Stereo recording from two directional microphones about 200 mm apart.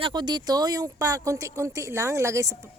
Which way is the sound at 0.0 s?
20° right (ahead or behind).